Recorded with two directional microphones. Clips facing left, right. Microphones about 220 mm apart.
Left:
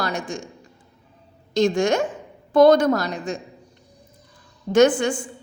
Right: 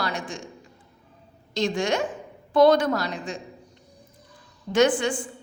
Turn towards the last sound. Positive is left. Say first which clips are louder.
# left 4 dB
turn(degrees=45)  # may be behind; listen again after turning